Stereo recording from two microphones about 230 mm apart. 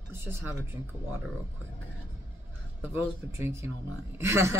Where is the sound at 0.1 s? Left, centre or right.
Centre.